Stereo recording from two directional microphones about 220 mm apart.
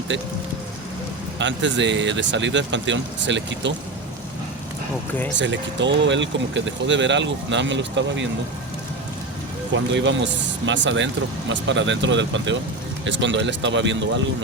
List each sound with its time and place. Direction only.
0.1 s speech: 55° right (ahead or behind)
1.4 s speech: 55° right (ahead or behind)
5.4 s speech: 55° right (ahead or behind)
9.7 s speech: 55° right (ahead or behind)